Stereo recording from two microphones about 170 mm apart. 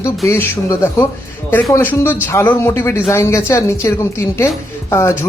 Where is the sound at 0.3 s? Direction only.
10° left (ahead or behind).